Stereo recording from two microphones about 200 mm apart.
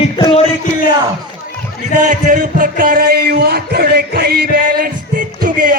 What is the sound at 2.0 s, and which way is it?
Music, 40° right (ahead or behind).